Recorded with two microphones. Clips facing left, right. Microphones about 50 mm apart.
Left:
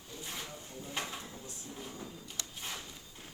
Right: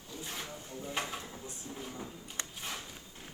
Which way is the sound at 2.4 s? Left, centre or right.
Right.